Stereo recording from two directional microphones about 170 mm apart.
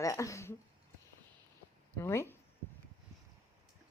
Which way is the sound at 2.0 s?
15° left (ahead or behind).